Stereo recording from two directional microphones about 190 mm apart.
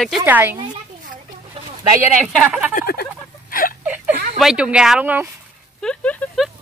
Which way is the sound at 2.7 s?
55° left (ahead or behind).